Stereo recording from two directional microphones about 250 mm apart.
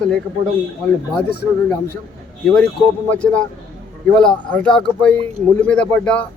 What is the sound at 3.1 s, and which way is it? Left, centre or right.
Speech, centre.